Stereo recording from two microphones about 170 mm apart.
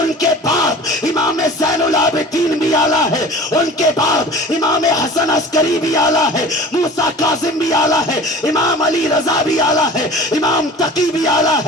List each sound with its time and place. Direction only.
0.2 s a sound: 20° left (ahead or behind)
4.9 s music: 20° left (ahead or behind)
7.2 s music: 20° left (ahead or behind)